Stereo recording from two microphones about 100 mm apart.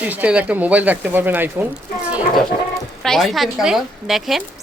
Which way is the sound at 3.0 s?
5° left (ahead or behind).